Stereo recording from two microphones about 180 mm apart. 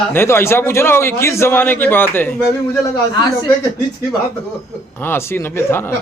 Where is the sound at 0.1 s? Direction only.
15° left (ahead or behind).